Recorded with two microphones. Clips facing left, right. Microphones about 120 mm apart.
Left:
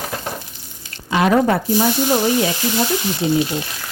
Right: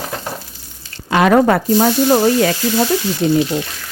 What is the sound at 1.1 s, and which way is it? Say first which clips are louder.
Speech: right 4 dB; 65° right (ahead or behind).